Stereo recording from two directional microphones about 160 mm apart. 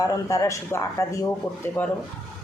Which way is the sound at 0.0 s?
20° left (ahead or behind).